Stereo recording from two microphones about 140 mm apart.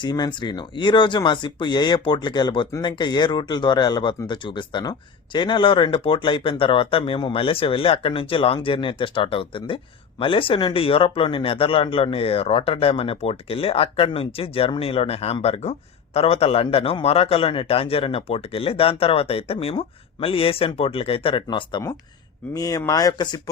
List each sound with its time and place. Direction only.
0.0 s a man's voice: 35° left (ahead or behind)
21.4 s speech: 30° left (ahead or behind)